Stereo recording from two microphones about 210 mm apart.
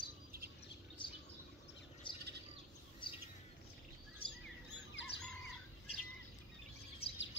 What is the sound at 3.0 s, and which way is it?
Bird, 25° left (ahead or behind).